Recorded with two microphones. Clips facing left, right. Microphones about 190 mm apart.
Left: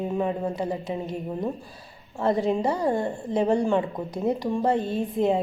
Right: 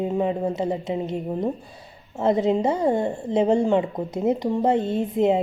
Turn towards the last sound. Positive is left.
turn(degrees=-20)  # may be behind; listen again after turning